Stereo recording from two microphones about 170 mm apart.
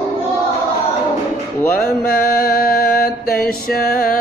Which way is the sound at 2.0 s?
60° left (ahead or behind).